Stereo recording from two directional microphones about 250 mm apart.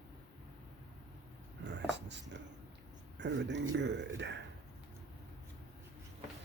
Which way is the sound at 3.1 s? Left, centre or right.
Right.